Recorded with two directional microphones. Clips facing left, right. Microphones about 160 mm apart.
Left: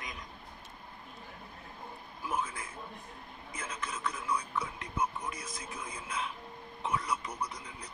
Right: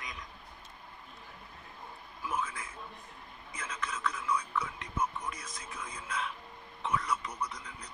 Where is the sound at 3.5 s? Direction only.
35° left (ahead or behind).